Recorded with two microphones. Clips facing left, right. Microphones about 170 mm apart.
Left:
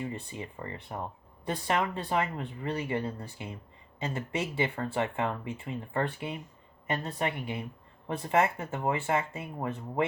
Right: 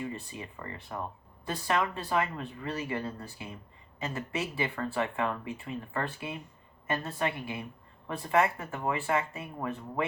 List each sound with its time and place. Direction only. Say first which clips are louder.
0.0 s speech: left 1 dB; 20° left (ahead or behind)